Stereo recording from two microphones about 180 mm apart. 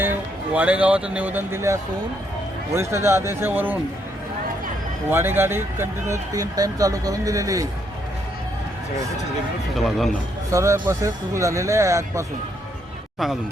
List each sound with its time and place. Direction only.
0.0 s a man's voice: 10° right (ahead or behind)
5.1 s speech: 10° right (ahead or behind)
9.7 s a man's voice: centre (ahead or behind)
10.5 s a man's voice: 15° right (ahead or behind)
13.1 s a man's voice: centre (ahead or behind)